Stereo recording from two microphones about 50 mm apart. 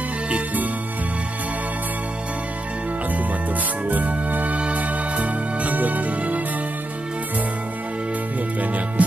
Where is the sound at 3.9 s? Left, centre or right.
Right.